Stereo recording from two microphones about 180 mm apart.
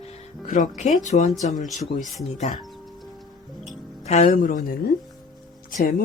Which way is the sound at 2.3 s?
45° left (ahead or behind).